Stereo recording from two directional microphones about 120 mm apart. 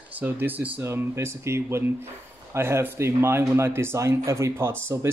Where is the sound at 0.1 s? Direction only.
15° right (ahead or behind).